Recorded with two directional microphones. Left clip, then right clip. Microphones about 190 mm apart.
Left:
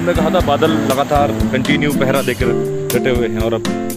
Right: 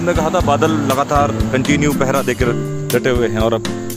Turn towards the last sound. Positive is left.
turn(degrees=-25)  # may be behind; listen again after turning